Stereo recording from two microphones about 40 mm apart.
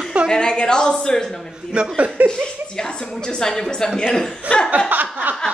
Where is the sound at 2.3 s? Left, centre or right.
Centre.